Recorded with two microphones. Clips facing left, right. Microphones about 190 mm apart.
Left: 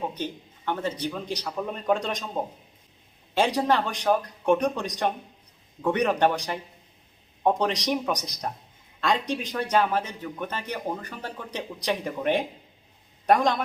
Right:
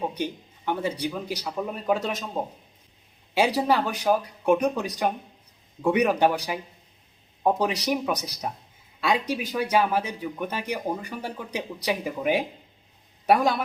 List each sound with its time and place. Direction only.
0.1 s a man's voice: 10° right (ahead or behind)